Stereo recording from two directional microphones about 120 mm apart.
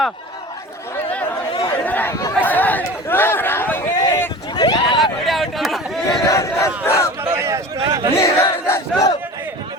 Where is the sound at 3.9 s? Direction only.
30° left (ahead or behind).